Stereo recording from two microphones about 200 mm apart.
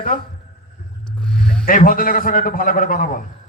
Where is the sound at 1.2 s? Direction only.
5° left (ahead or behind).